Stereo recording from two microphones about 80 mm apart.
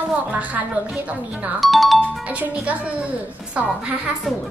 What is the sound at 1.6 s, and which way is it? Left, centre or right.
Speech, centre.